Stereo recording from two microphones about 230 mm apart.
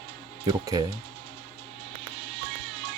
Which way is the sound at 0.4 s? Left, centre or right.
Centre.